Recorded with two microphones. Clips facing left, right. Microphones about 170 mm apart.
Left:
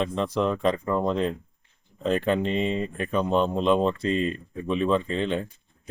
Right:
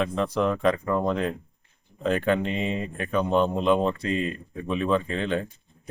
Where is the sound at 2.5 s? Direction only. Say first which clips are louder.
Left 3 dB; 5° right (ahead or behind).